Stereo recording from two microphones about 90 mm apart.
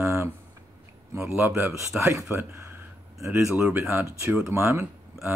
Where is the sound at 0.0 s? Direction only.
35° right (ahead or behind).